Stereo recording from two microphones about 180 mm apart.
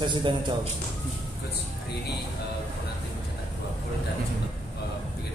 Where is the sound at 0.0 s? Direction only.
25° right (ahead or behind).